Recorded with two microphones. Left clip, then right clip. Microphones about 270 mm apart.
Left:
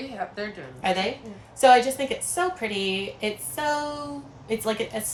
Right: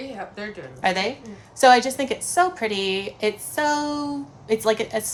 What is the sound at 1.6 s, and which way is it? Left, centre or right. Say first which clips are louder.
A woman's voice: right 2 dB; centre.